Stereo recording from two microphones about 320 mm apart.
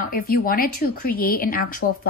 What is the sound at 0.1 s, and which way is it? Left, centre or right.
A woman's voice, left.